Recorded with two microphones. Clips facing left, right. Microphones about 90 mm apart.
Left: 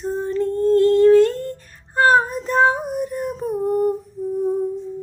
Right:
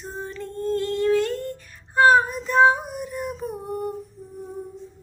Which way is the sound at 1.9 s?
35° left (ahead or behind).